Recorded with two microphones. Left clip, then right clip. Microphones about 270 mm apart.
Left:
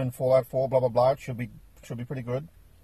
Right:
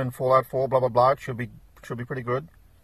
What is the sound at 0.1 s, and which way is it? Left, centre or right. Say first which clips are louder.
Speech: right 2 dB; centre.